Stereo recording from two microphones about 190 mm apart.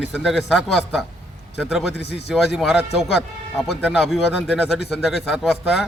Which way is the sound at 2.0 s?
60° left (ahead or behind).